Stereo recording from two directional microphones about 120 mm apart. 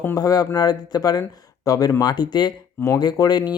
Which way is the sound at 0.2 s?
30° left (ahead or behind).